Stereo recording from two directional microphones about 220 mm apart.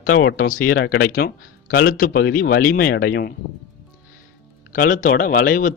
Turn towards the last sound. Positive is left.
turn(degrees=40)  # may be behind; listen again after turning